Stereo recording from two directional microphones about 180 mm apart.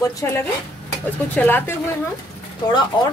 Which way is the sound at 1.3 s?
10° left (ahead or behind).